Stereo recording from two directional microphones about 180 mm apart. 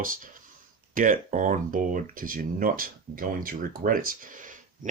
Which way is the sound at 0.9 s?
50° right (ahead or behind).